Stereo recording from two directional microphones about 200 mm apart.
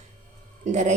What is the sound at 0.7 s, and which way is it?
Speech, 35° right (ahead or behind).